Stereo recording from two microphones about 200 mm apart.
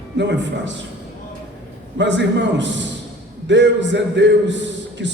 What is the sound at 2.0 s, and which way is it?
A man's voice, 65° right (ahead or behind).